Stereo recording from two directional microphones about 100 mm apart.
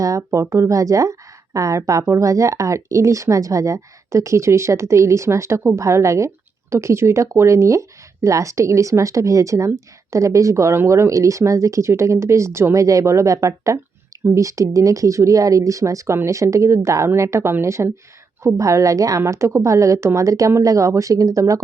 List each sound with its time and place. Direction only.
0.0 s speech: 30° right (ahead or behind)